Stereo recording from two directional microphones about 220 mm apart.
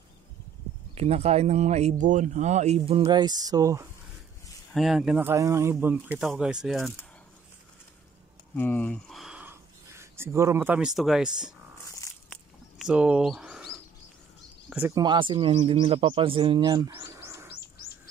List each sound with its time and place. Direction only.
0.9 s speech: 30° right (ahead or behind)
4.7 s speech: centre (ahead or behind)
8.5 s speech: 10° left (ahead or behind)
12.3 s a sound: centre (ahead or behind)
14.7 s speech: 10° right (ahead or behind)